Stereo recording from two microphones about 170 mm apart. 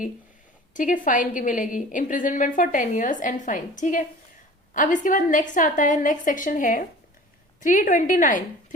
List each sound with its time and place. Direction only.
0.7 s a woman's voice: 50° left (ahead or behind)